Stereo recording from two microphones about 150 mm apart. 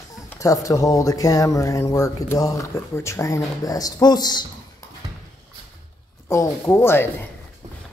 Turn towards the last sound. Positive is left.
turn(degrees=15)  # may be behind; listen again after turning